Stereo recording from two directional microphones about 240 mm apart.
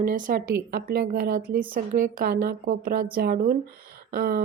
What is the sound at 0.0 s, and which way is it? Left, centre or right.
A woman's voice, right.